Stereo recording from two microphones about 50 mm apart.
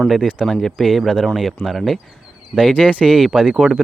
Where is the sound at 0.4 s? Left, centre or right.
Centre.